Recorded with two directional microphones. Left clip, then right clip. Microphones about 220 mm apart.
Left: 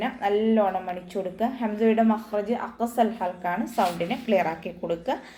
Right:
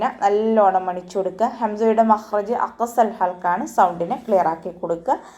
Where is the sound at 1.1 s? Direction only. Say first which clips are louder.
Right 7 dB; 15° right (ahead or behind).